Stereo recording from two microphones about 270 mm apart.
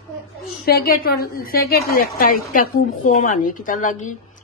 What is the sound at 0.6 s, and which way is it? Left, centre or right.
A woman's voice, left.